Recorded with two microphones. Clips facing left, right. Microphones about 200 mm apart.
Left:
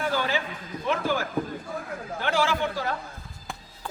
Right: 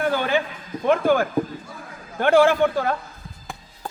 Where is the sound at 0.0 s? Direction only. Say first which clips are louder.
Right 5 dB; 55° right (ahead or behind).